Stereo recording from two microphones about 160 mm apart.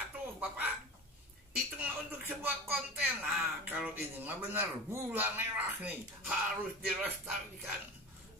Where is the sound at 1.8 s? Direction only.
10° right (ahead or behind).